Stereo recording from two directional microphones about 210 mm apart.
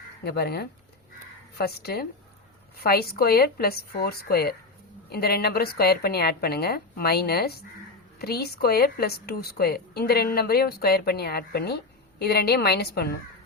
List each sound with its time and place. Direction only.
0.3 s a woman's voice: 50° left (ahead or behind)